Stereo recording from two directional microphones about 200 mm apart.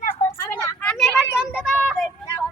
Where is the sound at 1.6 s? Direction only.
5° left (ahead or behind).